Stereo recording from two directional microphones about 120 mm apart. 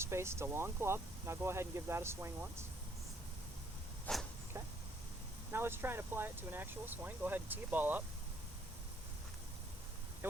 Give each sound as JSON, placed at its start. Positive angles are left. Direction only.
{"t": 0.0, "sound": "speech", "side_deg": -20}
{"t": 4.1, "sound": "a sound", "side_deg": 10}
{"t": 5.5, "sound": "speech", "side_deg": -20}